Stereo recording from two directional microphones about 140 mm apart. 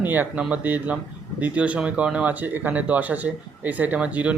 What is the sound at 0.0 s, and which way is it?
A man's voice, 15° right (ahead or behind).